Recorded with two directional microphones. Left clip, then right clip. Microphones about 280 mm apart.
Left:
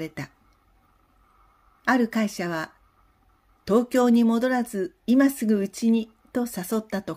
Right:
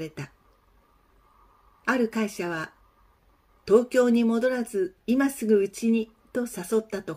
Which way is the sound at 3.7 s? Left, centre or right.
Left.